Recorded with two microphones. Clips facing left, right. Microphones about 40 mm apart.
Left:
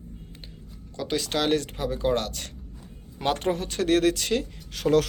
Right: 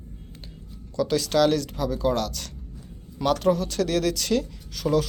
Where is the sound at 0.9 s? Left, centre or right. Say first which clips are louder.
Right 6 dB; left.